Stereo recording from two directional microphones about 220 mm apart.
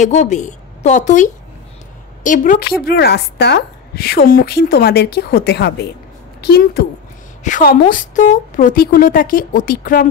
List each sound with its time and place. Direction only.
0.0 s a woman's voice: 30° left (ahead or behind)